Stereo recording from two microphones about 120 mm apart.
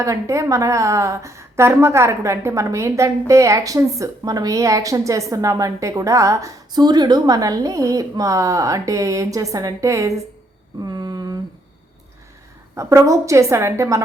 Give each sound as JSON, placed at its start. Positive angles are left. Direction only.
{"t": 0.0, "sound": "a woman's voice", "side_deg": -25}
{"t": 10.8, "sound": "a sound", "side_deg": -35}
{"t": 12.7, "sound": "a woman's voice", "side_deg": -25}